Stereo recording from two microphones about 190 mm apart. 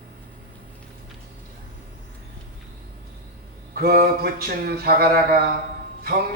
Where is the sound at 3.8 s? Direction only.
50° right (ahead or behind).